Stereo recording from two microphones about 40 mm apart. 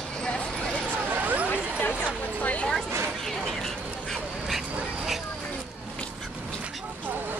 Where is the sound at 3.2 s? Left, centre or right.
Centre.